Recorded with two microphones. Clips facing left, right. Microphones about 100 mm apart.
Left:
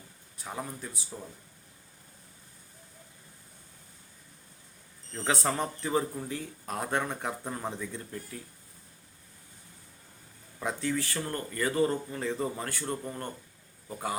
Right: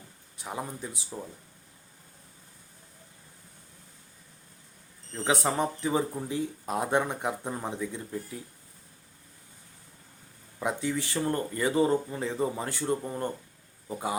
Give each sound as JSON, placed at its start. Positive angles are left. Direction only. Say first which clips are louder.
{"t": 0.3, "sound": "speech", "louder": "right 2 dB", "side_deg": -15}
{"t": 5.1, "sound": "speech", "louder": "right 2 dB", "side_deg": -15}
{"t": 10.6, "sound": "speech", "louder": "right 1 dB", "side_deg": -15}